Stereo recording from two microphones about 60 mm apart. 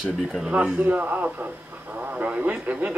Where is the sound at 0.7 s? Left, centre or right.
Right.